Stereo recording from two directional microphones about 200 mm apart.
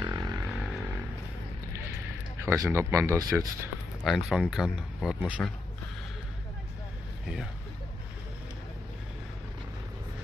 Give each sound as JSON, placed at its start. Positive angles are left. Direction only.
{"t": 0.0, "sound": "vehicle", "side_deg": -20}
{"t": 2.4, "sound": "speech", "side_deg": -15}
{"t": 4.0, "sound": "speech", "side_deg": 0}